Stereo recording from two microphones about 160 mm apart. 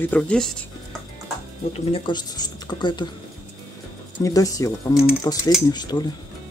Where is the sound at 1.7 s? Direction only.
35° left (ahead or behind).